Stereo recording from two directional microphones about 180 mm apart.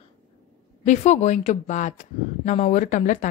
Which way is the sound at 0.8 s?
40° left (ahead or behind).